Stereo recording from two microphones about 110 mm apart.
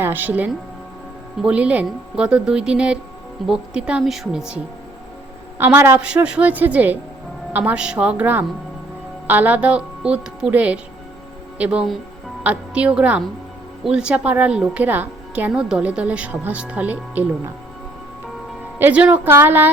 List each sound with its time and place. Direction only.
0.0 s speech: 20° right (ahead or behind)
5.5 s a woman's voice: 20° right (ahead or behind)
18.8 s speech: 15° right (ahead or behind)